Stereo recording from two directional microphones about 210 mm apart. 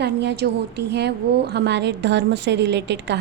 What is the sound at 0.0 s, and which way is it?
A woman's voice, 55° right (ahead or behind).